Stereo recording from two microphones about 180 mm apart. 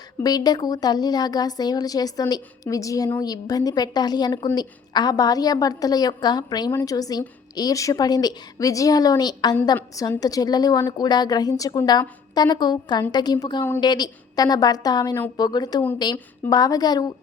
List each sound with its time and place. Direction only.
0.2 s a woman's voice: 20° left (ahead or behind)